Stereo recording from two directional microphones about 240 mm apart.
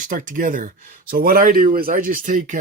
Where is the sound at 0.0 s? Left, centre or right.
Right.